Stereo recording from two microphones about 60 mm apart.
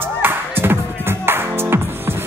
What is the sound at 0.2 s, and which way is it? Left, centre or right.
Music, right.